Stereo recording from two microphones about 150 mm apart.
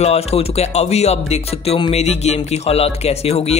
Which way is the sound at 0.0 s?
45° left (ahead or behind).